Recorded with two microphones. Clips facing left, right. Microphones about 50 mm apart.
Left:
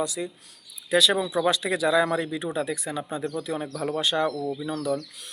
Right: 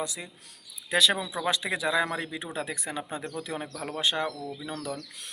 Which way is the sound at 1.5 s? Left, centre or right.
Right.